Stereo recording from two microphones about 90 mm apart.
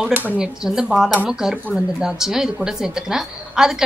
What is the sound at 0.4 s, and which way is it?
A woman's voice, 5° right (ahead or behind).